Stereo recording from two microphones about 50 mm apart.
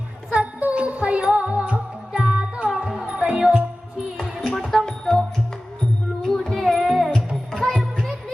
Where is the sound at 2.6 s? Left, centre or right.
Centre.